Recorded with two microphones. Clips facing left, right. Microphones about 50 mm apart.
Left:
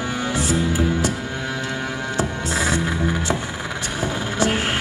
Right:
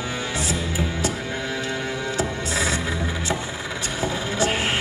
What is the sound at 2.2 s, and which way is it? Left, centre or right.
Music, left.